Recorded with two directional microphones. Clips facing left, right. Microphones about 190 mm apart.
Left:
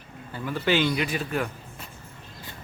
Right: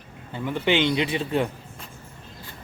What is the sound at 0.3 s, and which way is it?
A man's voice, 20° right (ahead or behind).